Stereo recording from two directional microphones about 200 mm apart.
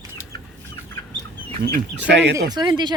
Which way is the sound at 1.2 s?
55° right (ahead or behind).